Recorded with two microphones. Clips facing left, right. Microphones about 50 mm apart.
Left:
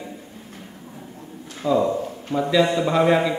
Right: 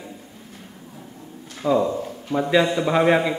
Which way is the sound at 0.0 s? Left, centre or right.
Left.